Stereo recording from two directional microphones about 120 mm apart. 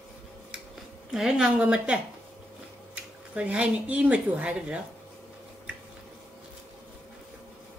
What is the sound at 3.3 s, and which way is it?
A woman's voice, 10° right (ahead or behind).